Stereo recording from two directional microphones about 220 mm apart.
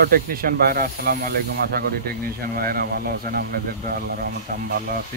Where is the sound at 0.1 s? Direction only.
40° right (ahead or behind).